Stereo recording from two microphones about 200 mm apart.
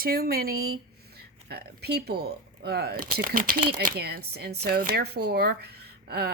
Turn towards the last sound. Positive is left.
turn(degrees=-50)  # may be behind; listen again after turning